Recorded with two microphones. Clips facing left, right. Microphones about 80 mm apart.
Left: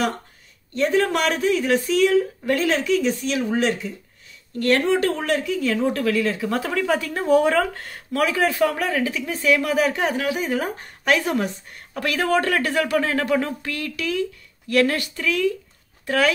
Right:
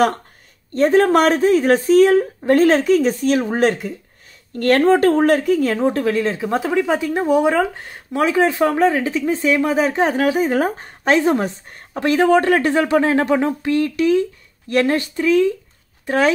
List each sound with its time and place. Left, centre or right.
0.7 s speech: right